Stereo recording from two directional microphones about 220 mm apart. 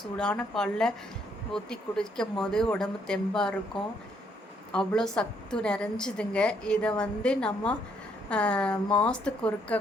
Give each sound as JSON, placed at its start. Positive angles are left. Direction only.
{"t": 0.2, "sound": "a woman's voice", "side_deg": 5}